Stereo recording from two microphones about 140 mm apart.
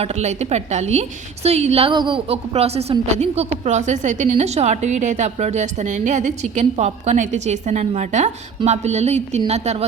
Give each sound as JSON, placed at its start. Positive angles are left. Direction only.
{"t": 0.0, "sound": "a woman's voice", "side_deg": -50}